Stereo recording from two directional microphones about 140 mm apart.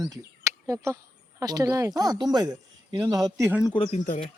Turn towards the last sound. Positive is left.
turn(degrees=70)  # may be behind; listen again after turning